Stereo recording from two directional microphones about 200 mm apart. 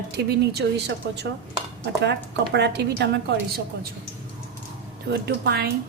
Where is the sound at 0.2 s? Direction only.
55° right (ahead or behind).